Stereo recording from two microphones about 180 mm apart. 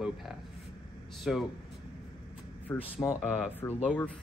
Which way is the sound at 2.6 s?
10° left (ahead or behind).